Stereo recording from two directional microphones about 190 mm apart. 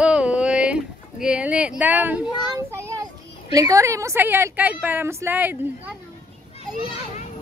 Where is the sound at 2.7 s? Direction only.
15° right (ahead or behind).